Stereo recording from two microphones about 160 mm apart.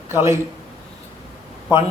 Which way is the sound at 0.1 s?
15° right (ahead or behind).